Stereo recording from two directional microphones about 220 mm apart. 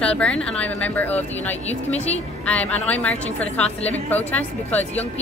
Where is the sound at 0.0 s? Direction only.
5° left (ahead or behind).